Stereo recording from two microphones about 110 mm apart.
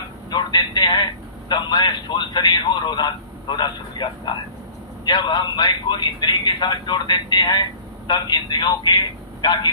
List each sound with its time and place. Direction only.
0.3 s a man's voice: 40° left (ahead or behind)